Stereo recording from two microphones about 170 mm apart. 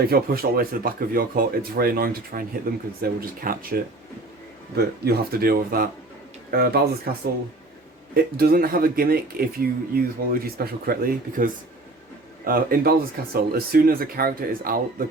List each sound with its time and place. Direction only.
0.0 s speech: 65° right (ahead or behind)
8.1 s speech: 60° right (ahead or behind)